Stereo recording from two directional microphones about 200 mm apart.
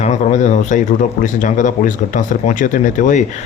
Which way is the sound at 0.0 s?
35° left (ahead or behind).